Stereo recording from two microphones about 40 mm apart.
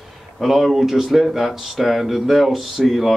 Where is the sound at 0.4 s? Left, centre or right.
Centre.